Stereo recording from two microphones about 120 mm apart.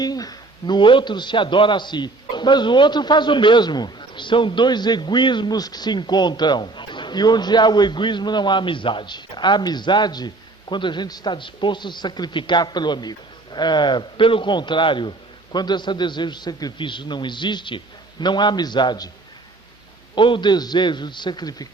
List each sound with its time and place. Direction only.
0.0 s a man's voice: 35° left (ahead or behind)
20.1 s a man's voice: 40° left (ahead or behind)